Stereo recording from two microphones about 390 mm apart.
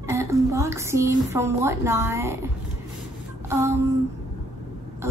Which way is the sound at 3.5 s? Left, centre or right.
Centre.